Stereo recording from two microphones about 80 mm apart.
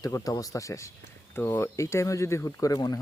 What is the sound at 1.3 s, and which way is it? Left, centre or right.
Speech, left.